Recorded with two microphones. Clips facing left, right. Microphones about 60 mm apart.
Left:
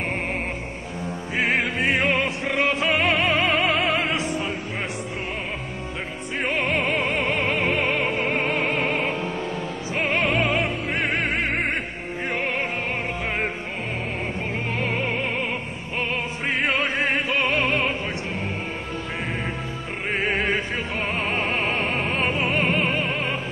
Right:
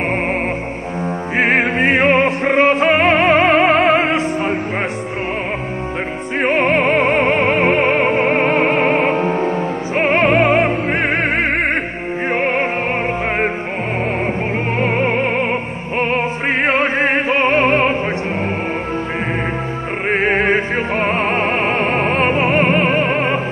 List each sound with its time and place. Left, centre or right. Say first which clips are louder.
1.0 s opera: right 8 dB; right
6.4 s music: right 9 dB; right
14.8 s music: right 10 dB; right
16.0 s opera: right 9 dB; right
20.1 s music: right 8 dB; right